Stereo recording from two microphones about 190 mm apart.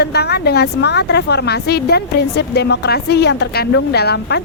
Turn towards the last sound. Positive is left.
turn(degrees=60)  # may be behind; listen again after turning